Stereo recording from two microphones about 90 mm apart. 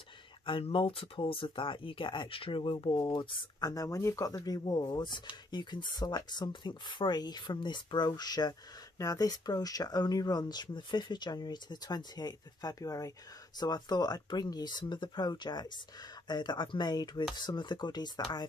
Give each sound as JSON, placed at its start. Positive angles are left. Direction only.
{"t": 0.5, "sound": "speech", "side_deg": 85}
{"t": 3.0, "sound": "speech", "side_deg": 55}
{"t": 13.6, "sound": "speech", "side_deg": 50}